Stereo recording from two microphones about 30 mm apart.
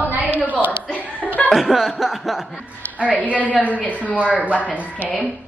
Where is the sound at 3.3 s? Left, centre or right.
Left.